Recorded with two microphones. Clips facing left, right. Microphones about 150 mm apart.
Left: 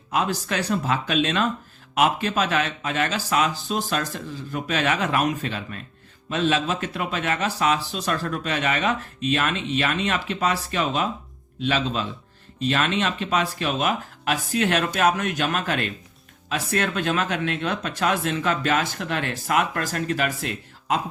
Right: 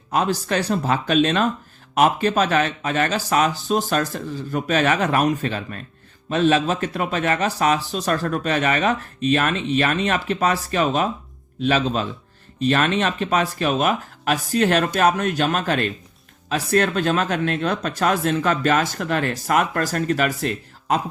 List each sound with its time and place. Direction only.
0.1 s speech: 40° right (ahead or behind)